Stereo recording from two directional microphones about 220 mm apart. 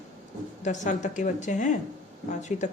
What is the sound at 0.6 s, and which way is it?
Speech, 35° left (ahead or behind).